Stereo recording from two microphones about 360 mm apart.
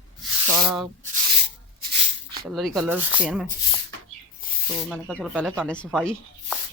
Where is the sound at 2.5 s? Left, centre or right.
Centre.